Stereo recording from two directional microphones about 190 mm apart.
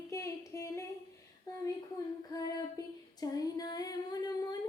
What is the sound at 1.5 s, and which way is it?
Speech, 20° left (ahead or behind).